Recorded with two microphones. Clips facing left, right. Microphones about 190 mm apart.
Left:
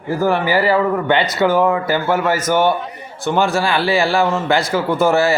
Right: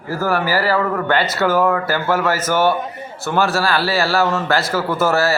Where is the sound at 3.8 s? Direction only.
15° left (ahead or behind).